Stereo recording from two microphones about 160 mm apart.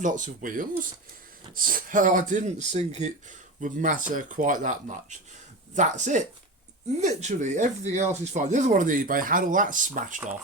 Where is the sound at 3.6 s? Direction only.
55° right (ahead or behind).